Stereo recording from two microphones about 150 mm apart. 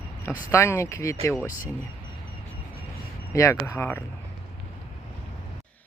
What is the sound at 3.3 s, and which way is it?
Speech, 20° left (ahead or behind).